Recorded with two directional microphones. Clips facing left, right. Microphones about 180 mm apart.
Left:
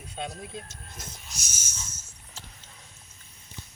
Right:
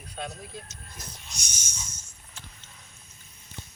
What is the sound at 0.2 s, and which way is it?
Speech, 20° left (ahead or behind).